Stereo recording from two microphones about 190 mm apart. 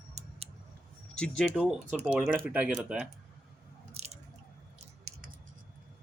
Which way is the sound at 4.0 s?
35° right (ahead or behind).